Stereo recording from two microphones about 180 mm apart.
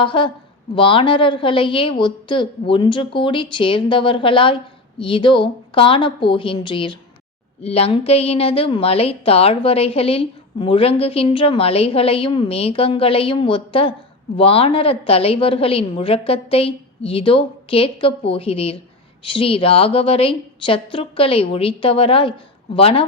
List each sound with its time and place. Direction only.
0.0 s a woman's voice: 25° left (ahead or behind)